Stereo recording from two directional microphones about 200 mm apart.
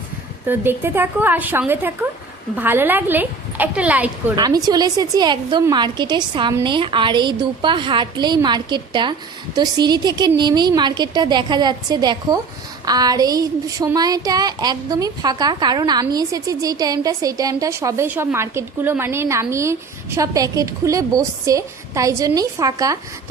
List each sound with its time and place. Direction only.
0.4 s speech: 10° right (ahead or behind)
4.4 s a woman's voice: 20° right (ahead or behind)